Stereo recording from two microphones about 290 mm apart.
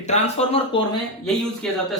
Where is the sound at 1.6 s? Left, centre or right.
Centre.